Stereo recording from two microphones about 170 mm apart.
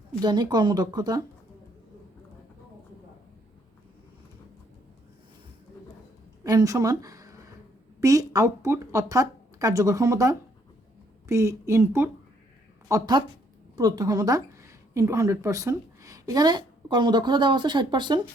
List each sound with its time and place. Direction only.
0.2 s speech: 25° right (ahead or behind)
6.4 s a sound: 20° right (ahead or behind)
8.0 s a woman's voice: 20° right (ahead or behind)